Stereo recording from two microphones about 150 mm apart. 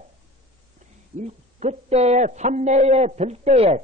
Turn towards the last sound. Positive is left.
turn(degrees=-45)  # may be behind; listen again after turning